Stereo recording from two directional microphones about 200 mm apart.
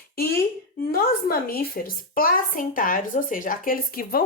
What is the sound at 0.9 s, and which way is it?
Speech, 50° left (ahead or behind).